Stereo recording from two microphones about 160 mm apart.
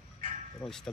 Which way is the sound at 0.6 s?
20° left (ahead or behind).